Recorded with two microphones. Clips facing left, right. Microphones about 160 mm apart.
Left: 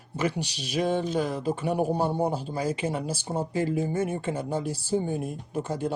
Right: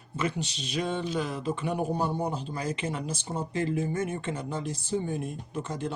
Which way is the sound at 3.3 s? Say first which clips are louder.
Left 3 dB; 45° left (ahead or behind).